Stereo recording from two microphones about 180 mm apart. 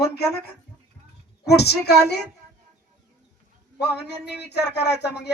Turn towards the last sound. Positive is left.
turn(degrees=65)  # may be behind; listen again after turning